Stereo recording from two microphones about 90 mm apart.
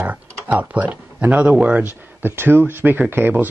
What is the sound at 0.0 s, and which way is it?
Speech, 20° right (ahead or behind).